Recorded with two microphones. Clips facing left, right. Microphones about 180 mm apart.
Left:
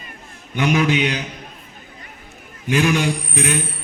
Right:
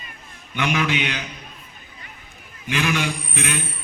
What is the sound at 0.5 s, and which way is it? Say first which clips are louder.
Speech: left 5 dB; 40° left (ahead or behind).